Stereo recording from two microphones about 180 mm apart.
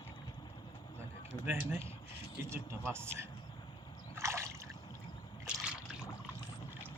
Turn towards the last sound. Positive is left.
turn(degrees=-5)  # may be behind; listen again after turning